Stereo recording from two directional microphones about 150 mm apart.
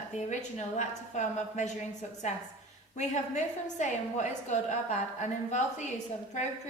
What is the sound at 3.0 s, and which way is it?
A woman's voice, 50° left (ahead or behind).